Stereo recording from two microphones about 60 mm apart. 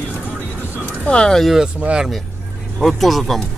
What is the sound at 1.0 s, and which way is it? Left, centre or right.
Speech, centre.